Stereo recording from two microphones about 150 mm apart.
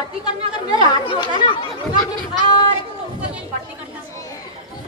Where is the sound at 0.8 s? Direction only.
30° left (ahead or behind).